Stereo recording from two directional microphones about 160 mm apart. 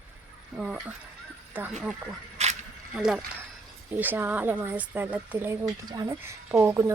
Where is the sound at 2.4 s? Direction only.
45° right (ahead or behind).